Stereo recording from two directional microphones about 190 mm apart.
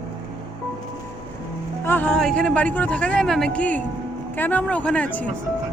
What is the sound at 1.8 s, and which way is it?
Speech, 10° left (ahead or behind).